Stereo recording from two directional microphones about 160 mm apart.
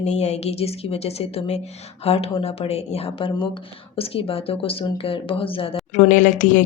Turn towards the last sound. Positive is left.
turn(degrees=55)  # may be behind; listen again after turning